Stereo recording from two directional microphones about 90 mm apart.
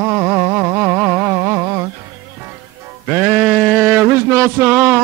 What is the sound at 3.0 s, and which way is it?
Music, 25° right (ahead or behind).